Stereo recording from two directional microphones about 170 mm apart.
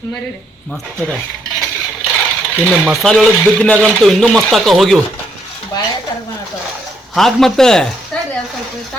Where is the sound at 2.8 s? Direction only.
Centre (ahead or behind).